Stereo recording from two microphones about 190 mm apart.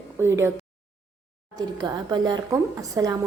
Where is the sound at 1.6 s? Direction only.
20° right (ahead or behind).